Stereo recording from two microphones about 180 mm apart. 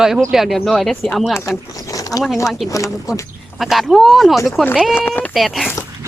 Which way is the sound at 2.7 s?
20° left (ahead or behind).